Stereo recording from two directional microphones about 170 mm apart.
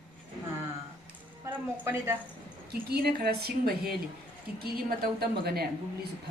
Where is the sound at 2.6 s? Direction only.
65° right (ahead or behind).